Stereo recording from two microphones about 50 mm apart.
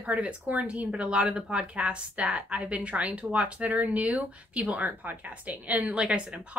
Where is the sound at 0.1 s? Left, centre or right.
Right.